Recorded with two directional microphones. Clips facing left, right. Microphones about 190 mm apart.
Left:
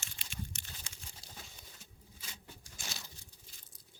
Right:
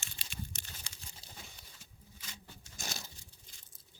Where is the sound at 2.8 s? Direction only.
45° right (ahead or behind).